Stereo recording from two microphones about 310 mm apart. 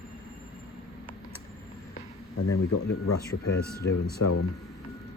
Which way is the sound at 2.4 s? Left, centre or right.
Left.